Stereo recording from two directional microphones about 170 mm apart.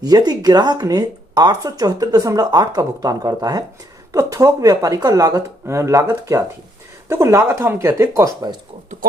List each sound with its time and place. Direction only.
0.0 s speech: 20° right (ahead or behind)